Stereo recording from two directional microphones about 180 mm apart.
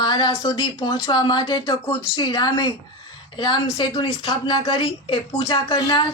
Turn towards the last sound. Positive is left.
turn(degrees=25)  # may be behind; listen again after turning